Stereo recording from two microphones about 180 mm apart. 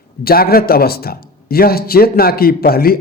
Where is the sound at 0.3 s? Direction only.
55° left (ahead or behind).